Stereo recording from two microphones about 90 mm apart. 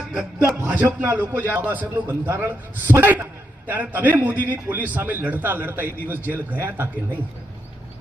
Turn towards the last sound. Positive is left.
turn(degrees=-25)  # may be behind; listen again after turning